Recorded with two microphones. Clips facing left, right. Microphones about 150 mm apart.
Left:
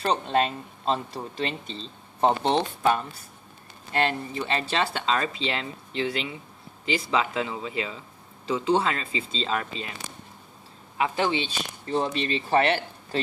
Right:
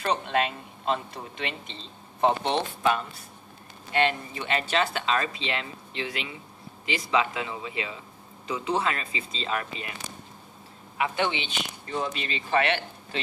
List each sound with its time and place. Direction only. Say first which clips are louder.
0.0 s speech: left 2 dB; 35° left (ahead or behind)
3.9 s speech: even; 40° left (ahead or behind)
11.0 s speech: left 2 dB; 35° left (ahead or behind)